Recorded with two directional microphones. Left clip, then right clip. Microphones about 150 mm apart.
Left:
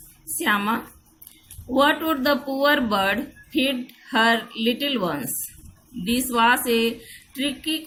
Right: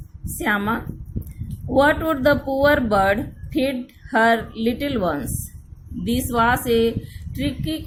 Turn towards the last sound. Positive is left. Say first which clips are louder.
# left 1 dB
turn(degrees=-40)  # may be behind; listen again after turning